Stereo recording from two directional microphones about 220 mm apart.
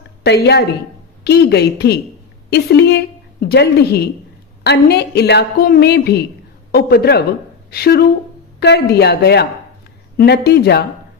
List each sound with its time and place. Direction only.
0.2 s a woman's voice: 50° left (ahead or behind)